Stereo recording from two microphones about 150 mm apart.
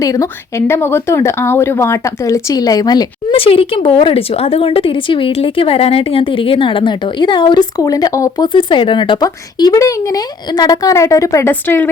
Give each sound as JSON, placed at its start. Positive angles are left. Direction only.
{"t": 0.0, "sound": "a woman's voice", "side_deg": 20}
{"t": 8.5, "sound": "a woman's voice", "side_deg": 35}